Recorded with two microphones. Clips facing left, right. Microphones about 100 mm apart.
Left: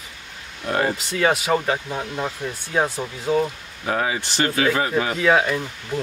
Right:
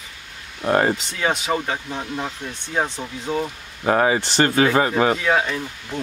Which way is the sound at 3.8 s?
40° right (ahead or behind).